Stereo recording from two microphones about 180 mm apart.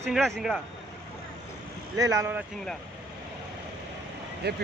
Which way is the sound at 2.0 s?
20° right (ahead or behind).